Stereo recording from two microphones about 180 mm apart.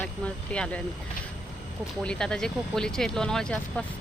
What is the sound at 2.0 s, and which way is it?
Speech, 5° left (ahead or behind).